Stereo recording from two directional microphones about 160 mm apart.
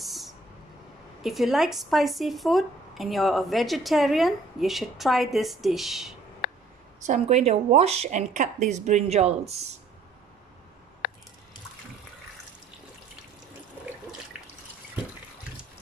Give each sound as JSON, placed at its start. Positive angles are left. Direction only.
{"t": 0.0, "sound": "vehicle", "side_deg": 0}
{"t": 1.2, "sound": "speech", "side_deg": 0}
{"t": 6.4, "sound": "a sound", "side_deg": 75}
{"t": 7.1, "sound": "speech", "side_deg": -45}